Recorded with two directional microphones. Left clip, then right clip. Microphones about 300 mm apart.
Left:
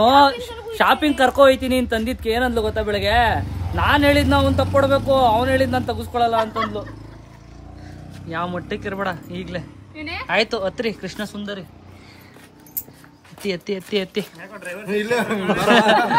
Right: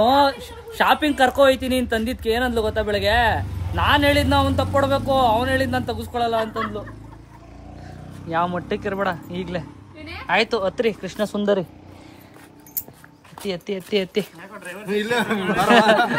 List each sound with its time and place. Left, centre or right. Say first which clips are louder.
0.0 s a man's voice: left 3 dB; centre
6.3 s speech: left 3 dB; centre
8.3 s a man's voice: right 3 dB; centre
13.5 s a man's voice: left 1 dB; centre